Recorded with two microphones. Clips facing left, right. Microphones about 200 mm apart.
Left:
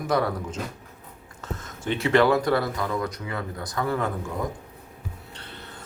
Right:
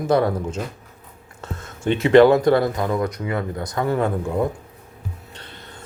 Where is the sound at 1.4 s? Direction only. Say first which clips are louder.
Right 4 dB; 30° right (ahead or behind).